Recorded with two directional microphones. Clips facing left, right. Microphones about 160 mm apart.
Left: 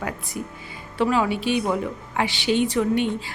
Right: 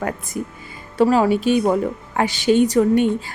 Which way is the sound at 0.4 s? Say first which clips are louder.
Right 4 dB; 40° right (ahead or behind).